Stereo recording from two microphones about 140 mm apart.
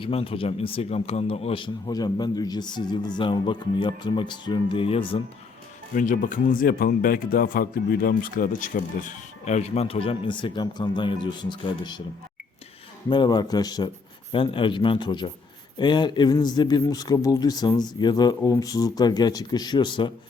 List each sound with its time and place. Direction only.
0.0 s speech: 40° left (ahead or behind)
5.9 s speech: 70° left (ahead or behind); by 12.0 s 30° left (ahead or behind)
13.1 s speech: 30° left (ahead or behind)